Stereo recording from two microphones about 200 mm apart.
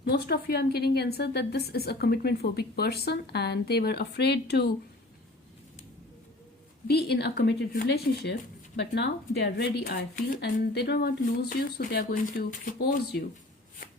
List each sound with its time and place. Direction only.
0.0 s a woman's voice: 55° left (ahead or behind)
6.8 s speech: 55° left (ahead or behind)
10.4 s a woman's voice: 55° left (ahead or behind)